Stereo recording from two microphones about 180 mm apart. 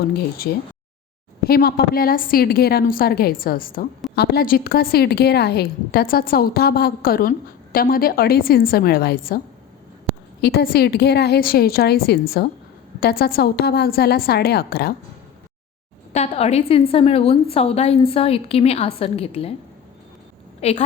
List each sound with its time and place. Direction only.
0.4 s a woman's voice: 55° left (ahead or behind)
10.4 s a woman's voice: 60° left (ahead or behind)
16.1 s a woman's voice: 35° left (ahead or behind)
20.6 s a woman's voice: 35° left (ahead or behind)